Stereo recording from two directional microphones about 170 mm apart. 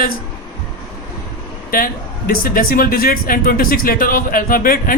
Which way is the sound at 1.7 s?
55° left (ahead or behind).